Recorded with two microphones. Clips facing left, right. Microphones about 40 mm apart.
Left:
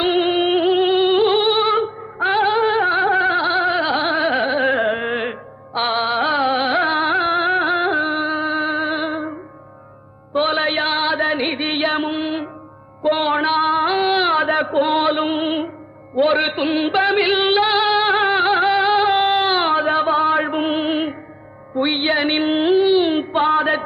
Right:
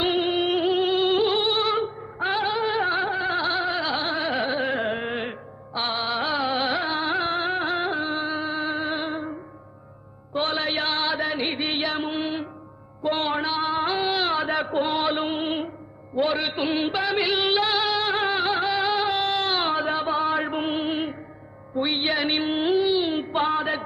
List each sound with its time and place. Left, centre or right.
0.2 s music: left
3.1 s gargling: left
3.3 s a sound: left
10.3 s chant: left
12.1 s music: left
13.0 s a sound: left
14.6 s music: left
16.6 s a man's voice: left
16.9 s music: left
23.2 s a sound: left